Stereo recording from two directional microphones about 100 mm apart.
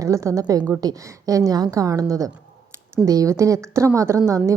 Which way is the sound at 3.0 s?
35° right (ahead or behind).